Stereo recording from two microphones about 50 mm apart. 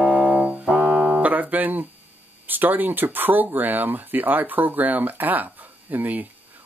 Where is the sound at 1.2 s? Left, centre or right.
Right.